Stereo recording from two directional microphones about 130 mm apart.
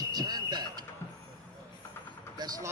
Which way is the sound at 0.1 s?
30° right (ahead or behind).